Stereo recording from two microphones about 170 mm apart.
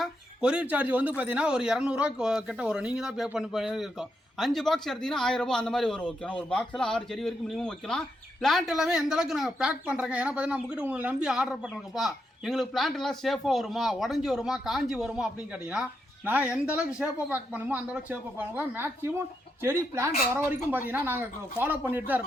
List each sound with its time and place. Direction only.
0.0 s speech: 5° right (ahead or behind)